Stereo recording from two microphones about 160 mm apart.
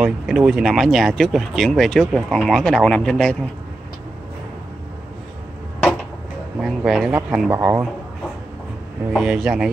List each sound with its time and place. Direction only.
0.0 s speech: 5° right (ahead or behind)
6.6 s a man's voice: centre (ahead or behind); by 7.8 s 15° right (ahead or behind)
9.1 s a man's voice: 5° right (ahead or behind)